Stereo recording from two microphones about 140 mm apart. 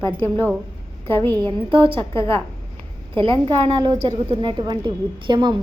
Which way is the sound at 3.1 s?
35° right (ahead or behind).